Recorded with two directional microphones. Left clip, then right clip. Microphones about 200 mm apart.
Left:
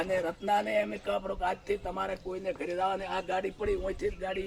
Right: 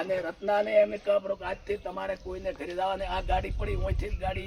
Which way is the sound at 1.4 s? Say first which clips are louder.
Left 3 dB; 35° left (ahead or behind).